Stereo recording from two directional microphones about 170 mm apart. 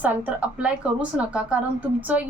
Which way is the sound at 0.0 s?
10° right (ahead or behind).